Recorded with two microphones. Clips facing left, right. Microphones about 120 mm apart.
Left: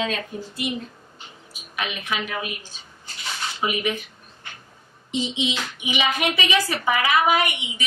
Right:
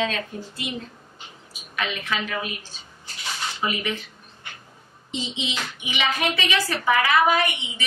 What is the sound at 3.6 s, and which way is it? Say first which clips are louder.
Speech: left 3 dB; 15° left (ahead or behind).